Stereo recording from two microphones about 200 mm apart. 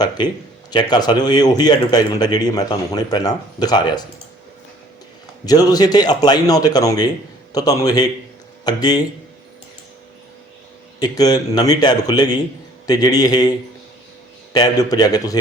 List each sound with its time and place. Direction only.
0.2 s speech: 20° left (ahead or behind)
5.5 s speech: 20° left (ahead or behind)
11.0 s speech: 20° left (ahead or behind)
14.5 s speech: 20° left (ahead or behind)